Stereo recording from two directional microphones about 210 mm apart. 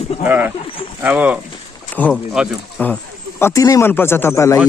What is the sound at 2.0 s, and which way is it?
Speech, 5° left (ahead or behind).